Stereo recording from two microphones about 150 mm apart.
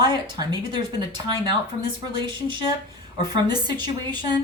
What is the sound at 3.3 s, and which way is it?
Speech, 30° right (ahead or behind).